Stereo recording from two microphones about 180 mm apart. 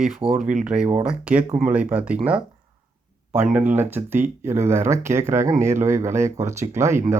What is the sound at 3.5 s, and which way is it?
Speech, 10° right (ahead or behind).